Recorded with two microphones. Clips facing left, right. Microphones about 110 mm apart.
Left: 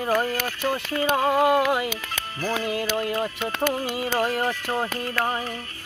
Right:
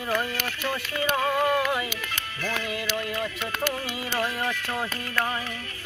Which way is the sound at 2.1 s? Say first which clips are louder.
Left 4 dB; 35° left (ahead or behind).